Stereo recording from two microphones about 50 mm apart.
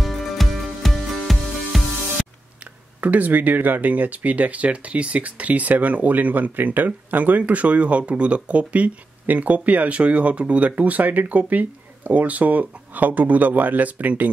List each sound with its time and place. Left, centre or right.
0.0 s music: centre
3.0 s speech: right